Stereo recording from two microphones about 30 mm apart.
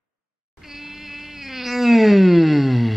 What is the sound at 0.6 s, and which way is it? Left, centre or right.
Cat, centre.